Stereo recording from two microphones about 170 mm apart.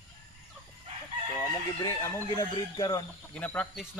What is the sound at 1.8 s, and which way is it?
Speech, 15° left (ahead or behind).